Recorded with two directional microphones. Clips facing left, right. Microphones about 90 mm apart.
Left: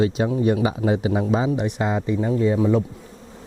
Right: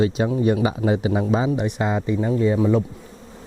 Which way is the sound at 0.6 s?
20° right (ahead or behind).